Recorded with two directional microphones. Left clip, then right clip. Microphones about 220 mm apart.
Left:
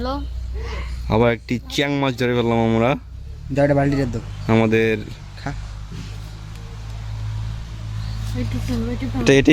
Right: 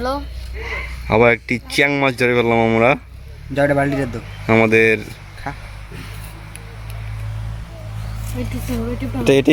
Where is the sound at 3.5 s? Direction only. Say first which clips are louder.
Right 1 dB; 15° left (ahead or behind).